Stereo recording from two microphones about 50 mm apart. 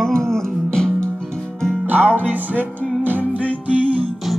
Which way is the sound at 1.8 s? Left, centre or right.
Right.